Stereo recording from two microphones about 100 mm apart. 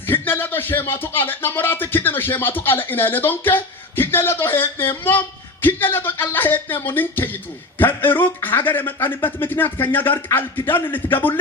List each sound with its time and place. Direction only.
0.1 s speech: 20° left (ahead or behind)